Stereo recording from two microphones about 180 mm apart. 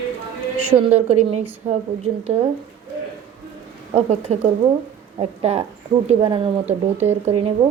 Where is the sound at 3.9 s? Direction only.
35° right (ahead or behind).